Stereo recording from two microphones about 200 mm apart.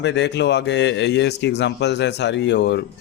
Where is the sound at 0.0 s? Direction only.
60° left (ahead or behind).